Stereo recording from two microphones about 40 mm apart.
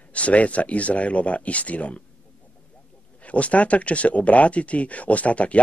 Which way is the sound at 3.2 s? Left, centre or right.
Left.